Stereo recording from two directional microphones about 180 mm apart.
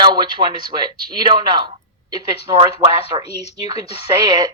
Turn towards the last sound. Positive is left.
turn(degrees=-20)  # may be behind; listen again after turning